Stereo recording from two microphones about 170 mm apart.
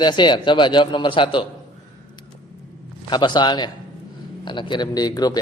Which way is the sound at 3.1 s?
25° left (ahead or behind).